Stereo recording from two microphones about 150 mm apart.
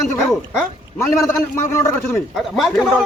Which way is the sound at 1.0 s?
20° left (ahead or behind).